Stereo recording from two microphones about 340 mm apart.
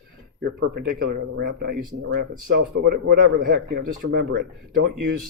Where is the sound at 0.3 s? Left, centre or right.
Right.